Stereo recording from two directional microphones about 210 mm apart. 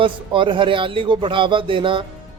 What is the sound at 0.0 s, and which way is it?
A man's voice, 25° right (ahead or behind).